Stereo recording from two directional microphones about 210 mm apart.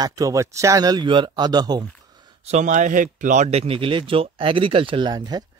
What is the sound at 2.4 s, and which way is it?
Speech, 35° right (ahead or behind).